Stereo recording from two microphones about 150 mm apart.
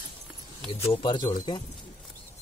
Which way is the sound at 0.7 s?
40° left (ahead or behind).